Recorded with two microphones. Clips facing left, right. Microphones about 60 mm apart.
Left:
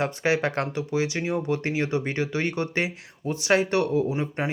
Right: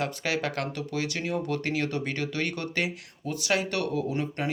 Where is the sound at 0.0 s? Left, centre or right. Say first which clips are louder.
Left 5 dB; left.